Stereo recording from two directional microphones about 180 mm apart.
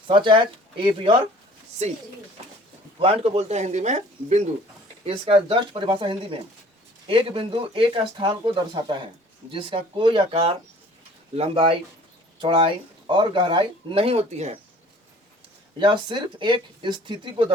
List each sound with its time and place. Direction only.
0.1 s speech: 25° right (ahead or behind)
3.0 s speech: 35° right (ahead or behind)
15.8 s speech: 25° right (ahead or behind)